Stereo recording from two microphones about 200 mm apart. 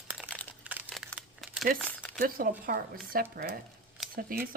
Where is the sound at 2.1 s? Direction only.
45° right (ahead or behind).